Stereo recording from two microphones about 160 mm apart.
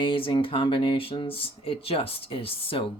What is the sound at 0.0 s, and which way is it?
Speech, 30° left (ahead or behind).